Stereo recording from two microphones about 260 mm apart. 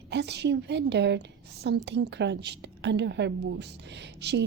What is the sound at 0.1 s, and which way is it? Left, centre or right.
A woman's voice, right.